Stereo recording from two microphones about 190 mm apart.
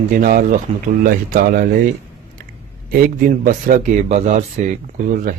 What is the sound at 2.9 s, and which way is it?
A man's voice, 45° right (ahead or behind).